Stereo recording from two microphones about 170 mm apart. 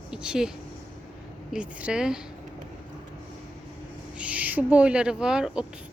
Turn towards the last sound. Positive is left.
turn(degrees=-5)  # may be behind; listen again after turning